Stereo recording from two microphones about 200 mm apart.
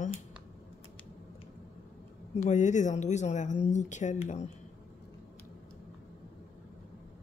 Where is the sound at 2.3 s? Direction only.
35° left (ahead or behind).